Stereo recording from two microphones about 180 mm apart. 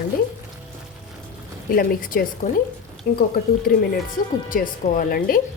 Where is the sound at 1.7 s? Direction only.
50° left (ahead or behind).